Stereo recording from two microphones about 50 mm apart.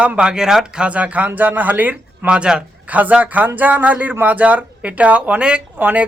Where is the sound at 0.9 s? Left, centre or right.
Right.